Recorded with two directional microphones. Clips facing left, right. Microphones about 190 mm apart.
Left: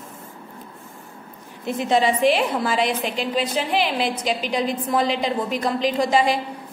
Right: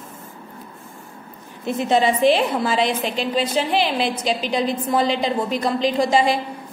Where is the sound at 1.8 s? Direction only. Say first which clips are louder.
Right 2 dB; 25° right (ahead or behind).